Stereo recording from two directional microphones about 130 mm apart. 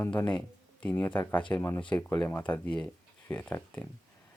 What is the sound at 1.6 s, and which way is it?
Speech, 25° left (ahead or behind).